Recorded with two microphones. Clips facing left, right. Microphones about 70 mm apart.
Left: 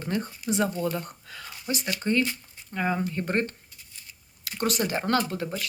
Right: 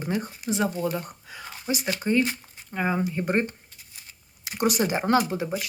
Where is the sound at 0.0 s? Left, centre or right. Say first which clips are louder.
Right 1 dB; centre.